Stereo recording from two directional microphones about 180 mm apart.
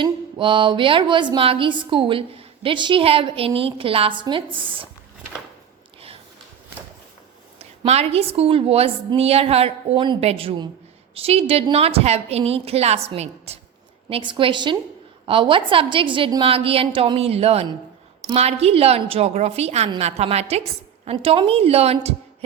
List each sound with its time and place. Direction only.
0.0 s speech: 30° right (ahead or behind)
7.6 s a woman's voice: 35° right (ahead or behind)